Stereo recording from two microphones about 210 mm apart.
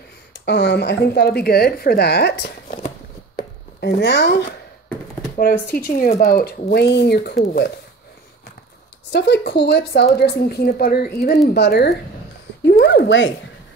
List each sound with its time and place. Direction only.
0.3 s a woman's voice: 55° left (ahead or behind)
3.3 s chopping: 55° left (ahead or behind)
5.4 s a woman's voice: 45° left (ahead or behind)
9.1 s a woman's voice: 55° left (ahead or behind)
12.6 s a sound: 55° left (ahead or behind)